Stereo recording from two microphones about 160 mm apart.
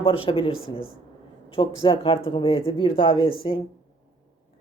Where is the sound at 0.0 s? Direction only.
35° left (ahead or behind).